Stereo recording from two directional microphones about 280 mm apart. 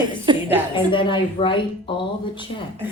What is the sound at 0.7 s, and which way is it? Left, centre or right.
A woman's voice, centre.